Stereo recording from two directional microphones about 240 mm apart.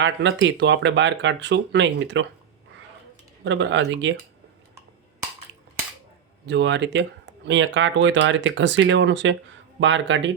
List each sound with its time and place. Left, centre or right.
0.0 s speech: right
3.4 s speech: right
6.4 s speech: right